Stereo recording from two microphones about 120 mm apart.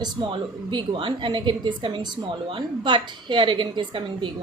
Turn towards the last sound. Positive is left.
turn(degrees=-45)  # may be behind; listen again after turning